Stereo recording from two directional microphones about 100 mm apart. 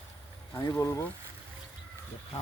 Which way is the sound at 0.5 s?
30° left (ahead or behind).